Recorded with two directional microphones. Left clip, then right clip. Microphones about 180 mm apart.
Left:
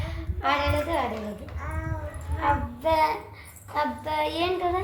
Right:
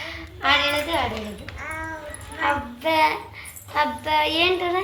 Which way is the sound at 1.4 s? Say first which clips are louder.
Right 5 dB; 15° left (ahead or behind).